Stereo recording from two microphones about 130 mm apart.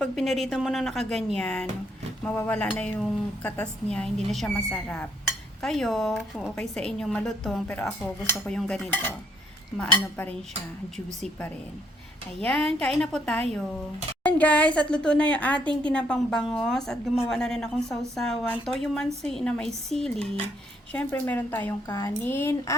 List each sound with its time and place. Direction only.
0.0 s a woman's voice: centre (ahead or behind)
2.2 s a woman's voice: 15° left (ahead or behind)
5.2 s dishes: centre (ahead or behind)
6.6 s a woman's voice: 5° left (ahead or behind)
7.7 s a woman's voice: 10° left (ahead or behind)
12.4 s a woman's voice: 5° left (ahead or behind)